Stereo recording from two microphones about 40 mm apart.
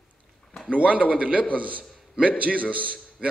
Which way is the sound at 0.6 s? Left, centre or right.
Right.